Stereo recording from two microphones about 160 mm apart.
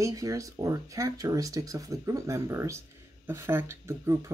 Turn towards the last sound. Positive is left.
turn(degrees=-15)  # may be behind; listen again after turning